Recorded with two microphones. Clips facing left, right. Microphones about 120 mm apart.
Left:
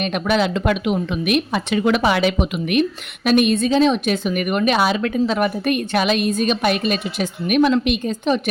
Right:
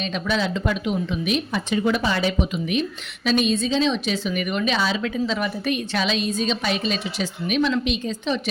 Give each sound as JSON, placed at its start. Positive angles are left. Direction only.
{"t": 0.0, "sound": "a woman's voice", "side_deg": 65}